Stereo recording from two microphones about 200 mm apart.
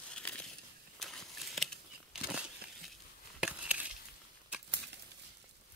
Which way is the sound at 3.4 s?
5° right (ahead or behind).